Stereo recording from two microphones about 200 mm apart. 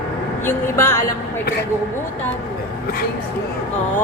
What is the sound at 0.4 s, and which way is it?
Speech, 15° left (ahead or behind).